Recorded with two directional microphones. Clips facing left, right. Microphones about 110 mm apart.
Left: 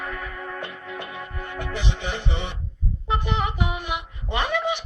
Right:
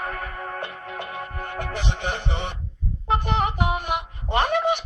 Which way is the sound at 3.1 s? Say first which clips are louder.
Right 3 dB; 45° right (ahead or behind).